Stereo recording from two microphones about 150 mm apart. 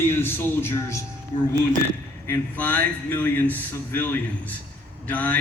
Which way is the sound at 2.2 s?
15° left (ahead or behind).